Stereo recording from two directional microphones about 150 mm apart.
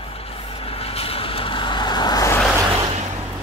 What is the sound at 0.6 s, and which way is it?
Vehicle, 40° left (ahead or behind).